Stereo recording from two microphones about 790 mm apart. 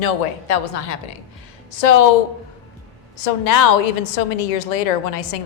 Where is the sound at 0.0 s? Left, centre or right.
Left.